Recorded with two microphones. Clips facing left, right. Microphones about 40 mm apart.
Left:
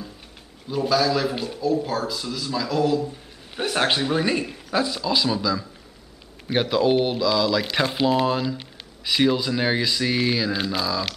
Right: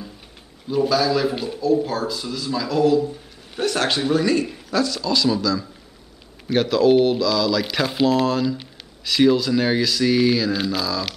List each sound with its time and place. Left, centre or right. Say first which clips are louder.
0.7 s speech: right 2 dB; centre
3.1 s a sound: right 3 dB; centre
4.1 s speech: right 3 dB; left